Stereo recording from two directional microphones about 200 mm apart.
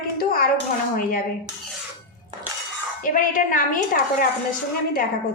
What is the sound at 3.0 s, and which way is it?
A woman's voice, 40° left (ahead or behind).